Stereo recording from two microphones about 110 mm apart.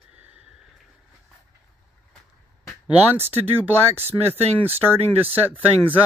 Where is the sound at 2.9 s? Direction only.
20° right (ahead or behind).